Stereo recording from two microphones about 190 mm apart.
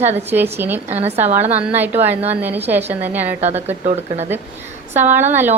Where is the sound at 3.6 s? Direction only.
35° right (ahead or behind).